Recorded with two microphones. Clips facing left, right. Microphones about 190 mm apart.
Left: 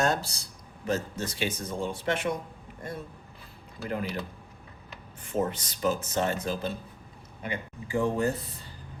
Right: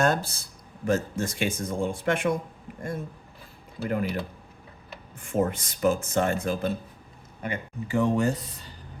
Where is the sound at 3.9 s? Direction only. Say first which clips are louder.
Right 4 dB; 50° right (ahead or behind).